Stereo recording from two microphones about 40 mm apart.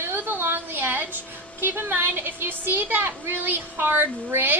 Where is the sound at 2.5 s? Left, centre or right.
Right.